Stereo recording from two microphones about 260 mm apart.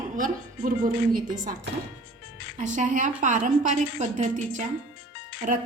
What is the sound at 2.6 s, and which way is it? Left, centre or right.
A woman's voice, right.